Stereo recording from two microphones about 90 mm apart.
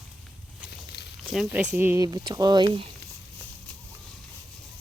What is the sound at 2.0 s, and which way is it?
Speech, 50° right (ahead or behind).